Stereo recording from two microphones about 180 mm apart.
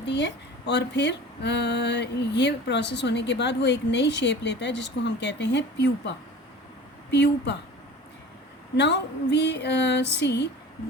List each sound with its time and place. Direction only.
0.0 s speech: 75° left (ahead or behind)
8.7 s speech: 70° left (ahead or behind)